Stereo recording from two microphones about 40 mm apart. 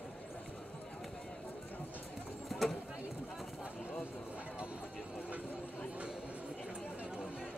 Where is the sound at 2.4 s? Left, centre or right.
Centre.